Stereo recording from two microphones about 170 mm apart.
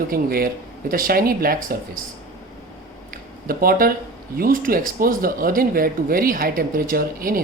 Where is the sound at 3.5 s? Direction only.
55° right (ahead or behind).